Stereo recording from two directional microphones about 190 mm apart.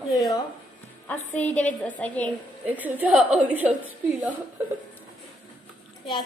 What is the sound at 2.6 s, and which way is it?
A woman's voice, 10° right (ahead or behind).